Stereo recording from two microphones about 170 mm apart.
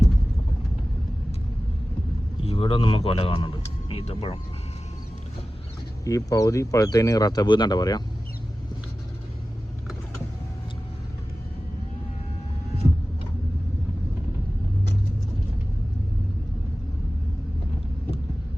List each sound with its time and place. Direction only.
2.4 s speech: 35° left (ahead or behind)
6.1 s speech: 20° left (ahead or behind)